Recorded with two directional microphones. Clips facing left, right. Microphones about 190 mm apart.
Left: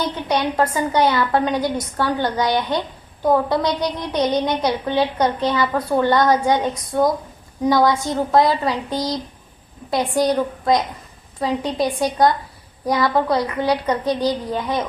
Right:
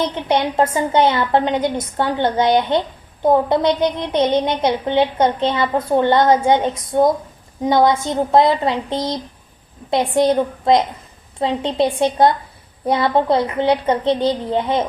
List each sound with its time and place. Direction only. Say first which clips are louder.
0.0 s a woman's voice: right 3 dB; 25° right (ahead or behind)